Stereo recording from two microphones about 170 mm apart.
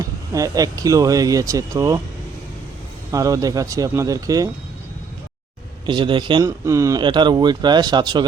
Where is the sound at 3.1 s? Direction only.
20° right (ahead or behind).